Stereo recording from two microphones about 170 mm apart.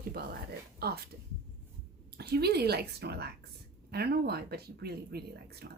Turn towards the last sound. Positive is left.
turn(degrees=-70)  # may be behind; listen again after turning